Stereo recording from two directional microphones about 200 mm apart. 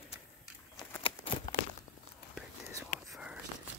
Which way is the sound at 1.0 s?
25° left (ahead or behind).